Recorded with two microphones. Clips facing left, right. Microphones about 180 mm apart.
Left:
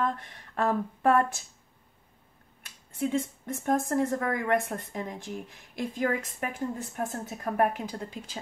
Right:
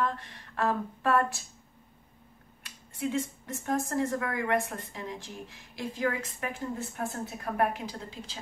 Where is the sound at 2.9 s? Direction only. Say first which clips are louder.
Left 2 dB; 50° left (ahead or behind).